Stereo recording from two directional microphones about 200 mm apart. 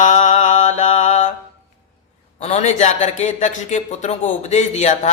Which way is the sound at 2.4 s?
35° left (ahead or behind).